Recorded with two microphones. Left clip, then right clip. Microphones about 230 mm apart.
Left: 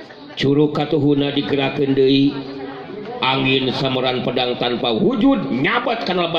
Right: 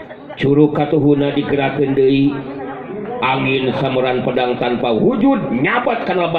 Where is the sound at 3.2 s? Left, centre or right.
Left.